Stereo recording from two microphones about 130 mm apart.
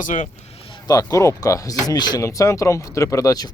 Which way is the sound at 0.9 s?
25° left (ahead or behind).